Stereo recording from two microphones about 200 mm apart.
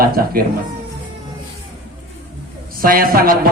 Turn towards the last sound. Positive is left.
turn(degrees=-45)  # may be behind; listen again after turning